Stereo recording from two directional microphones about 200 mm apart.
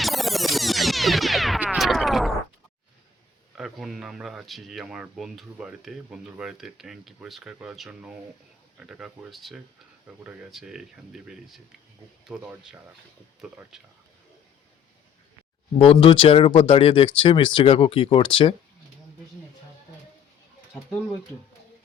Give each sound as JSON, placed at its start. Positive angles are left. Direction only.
{"t": 0.0, "sound": "music", "side_deg": 0}
{"t": 3.6, "sound": "speech", "side_deg": 0}
{"t": 15.8, "sound": "speech", "side_deg": 25}